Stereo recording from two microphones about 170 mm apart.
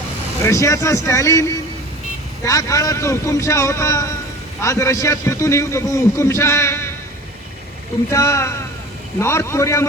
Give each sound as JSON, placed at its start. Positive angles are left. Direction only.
{"t": 0.4, "sound": "a man's voice", "side_deg": 20}
{"t": 8.1, "sound": "a man's voice", "side_deg": 15}